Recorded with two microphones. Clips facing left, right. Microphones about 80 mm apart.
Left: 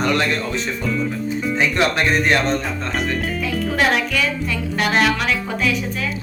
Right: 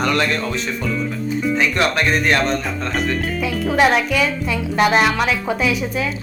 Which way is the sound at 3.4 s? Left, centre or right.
Centre.